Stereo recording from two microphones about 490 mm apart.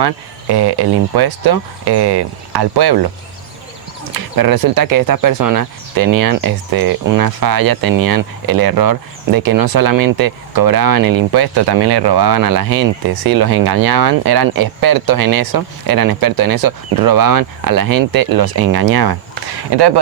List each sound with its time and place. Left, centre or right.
0.0 s speech: right
4.1 s speech: right